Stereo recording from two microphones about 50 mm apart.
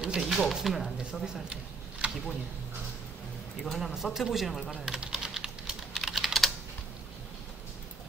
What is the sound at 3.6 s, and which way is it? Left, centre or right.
A woman's voice, centre.